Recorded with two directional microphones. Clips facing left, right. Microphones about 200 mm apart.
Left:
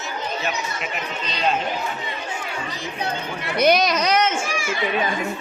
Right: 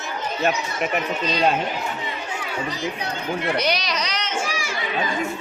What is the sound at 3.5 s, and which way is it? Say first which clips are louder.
Speech: left 6 dB; 50° left (ahead or behind).